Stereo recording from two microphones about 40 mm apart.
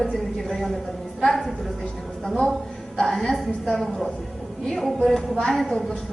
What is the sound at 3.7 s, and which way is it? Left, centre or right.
A woman's voice, centre.